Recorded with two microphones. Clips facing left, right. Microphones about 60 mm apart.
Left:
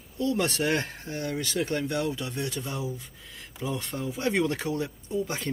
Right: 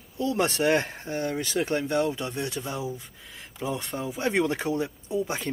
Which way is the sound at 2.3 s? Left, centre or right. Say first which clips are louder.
Right 1 dB; centre.